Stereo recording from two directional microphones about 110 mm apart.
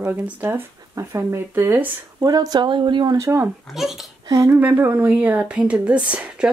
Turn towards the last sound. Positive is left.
turn(degrees=-10)  # may be behind; listen again after turning